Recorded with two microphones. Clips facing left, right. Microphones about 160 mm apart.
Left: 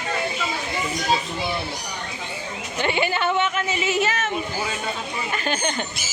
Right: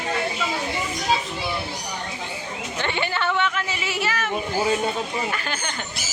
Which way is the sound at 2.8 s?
15° left (ahead or behind).